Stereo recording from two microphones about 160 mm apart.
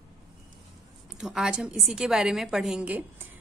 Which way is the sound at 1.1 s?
5° right (ahead or behind).